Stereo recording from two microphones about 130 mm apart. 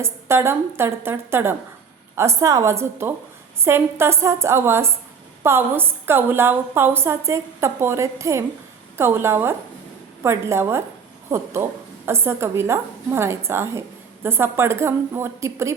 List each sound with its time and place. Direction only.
0.0 s a woman's voice: 20° right (ahead or behind)